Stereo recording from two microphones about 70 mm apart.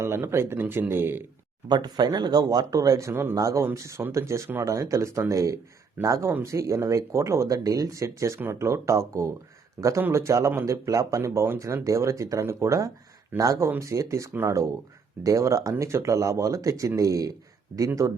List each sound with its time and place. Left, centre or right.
0.0 s speech: right
1.6 s speech: right
3.1 s speech: right
3.3 s speech: right
3.8 s speech: right
7.9 s speech: right
11.2 s speech: right